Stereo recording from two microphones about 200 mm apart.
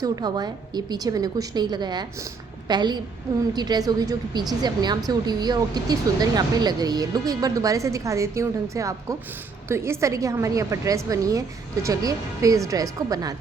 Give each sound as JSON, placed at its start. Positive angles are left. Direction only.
{"t": 0.0, "sound": "a woman's voice", "side_deg": -20}